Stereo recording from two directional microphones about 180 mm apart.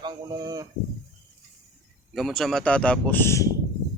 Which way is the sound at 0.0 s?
20° right (ahead or behind).